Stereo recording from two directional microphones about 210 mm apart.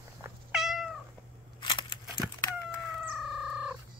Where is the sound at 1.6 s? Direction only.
20° left (ahead or behind).